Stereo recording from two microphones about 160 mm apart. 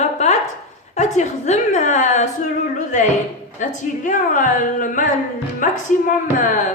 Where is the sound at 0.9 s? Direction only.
50° left (ahead or behind).